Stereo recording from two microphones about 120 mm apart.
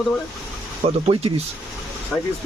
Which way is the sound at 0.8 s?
50° right (ahead or behind).